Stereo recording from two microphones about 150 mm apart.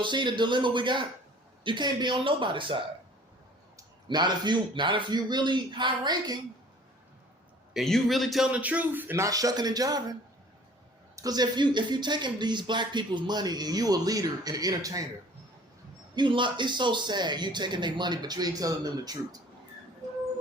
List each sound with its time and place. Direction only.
0.0 s a man's voice: 30° right (ahead or behind)
3.8 s a man's voice: 30° right (ahead or behind)
7.7 s a man's voice: centre (ahead or behind); by 10.2 s 25° right (ahead or behind)
11.2 s speech: 25° right (ahead or behind)
16.1 s speech: 30° right (ahead or behind)